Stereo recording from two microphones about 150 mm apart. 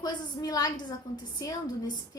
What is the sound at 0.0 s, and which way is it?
A woman's voice, 25° left (ahead or behind).